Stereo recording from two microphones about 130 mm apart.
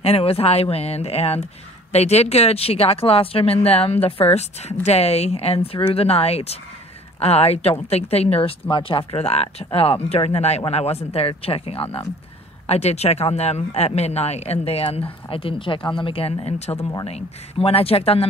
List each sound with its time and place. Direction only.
0.0 s a man's voice: 50° left (ahead or behind)